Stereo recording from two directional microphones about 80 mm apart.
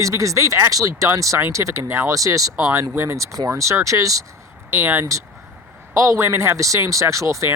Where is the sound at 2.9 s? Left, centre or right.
Right.